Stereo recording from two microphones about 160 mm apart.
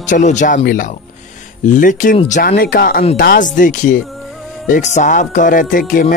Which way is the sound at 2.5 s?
75° left (ahead or behind).